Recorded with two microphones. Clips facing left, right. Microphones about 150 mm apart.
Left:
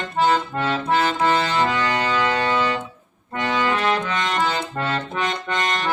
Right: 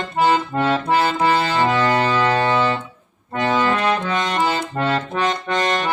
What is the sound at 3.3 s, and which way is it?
Accordion, 25° right (ahead or behind).